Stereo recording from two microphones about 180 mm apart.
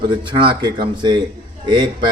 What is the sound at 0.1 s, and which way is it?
A man's voice, 25° right (ahead or behind).